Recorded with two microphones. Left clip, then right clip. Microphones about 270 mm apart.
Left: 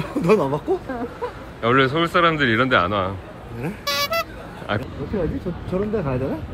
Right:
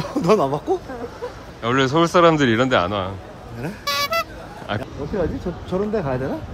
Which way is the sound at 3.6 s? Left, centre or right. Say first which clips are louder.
Right 1 dB; centre.